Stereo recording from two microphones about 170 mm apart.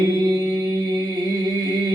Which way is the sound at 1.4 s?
25° right (ahead or behind).